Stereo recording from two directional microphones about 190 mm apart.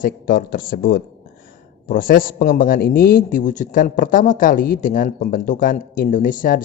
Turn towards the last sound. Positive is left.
turn(degrees=45)  # may be behind; listen again after turning